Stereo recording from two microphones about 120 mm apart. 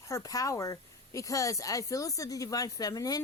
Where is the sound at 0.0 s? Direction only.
25° left (ahead or behind).